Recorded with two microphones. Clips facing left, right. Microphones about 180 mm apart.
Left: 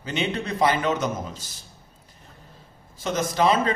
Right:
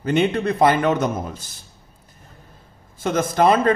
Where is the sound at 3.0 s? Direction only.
55° right (ahead or behind).